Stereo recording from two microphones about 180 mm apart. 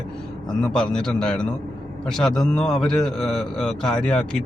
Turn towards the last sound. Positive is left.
turn(degrees=5)  # may be behind; listen again after turning